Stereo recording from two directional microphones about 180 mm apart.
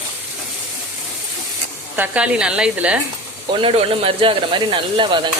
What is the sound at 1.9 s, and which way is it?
Speech, 10° right (ahead or behind).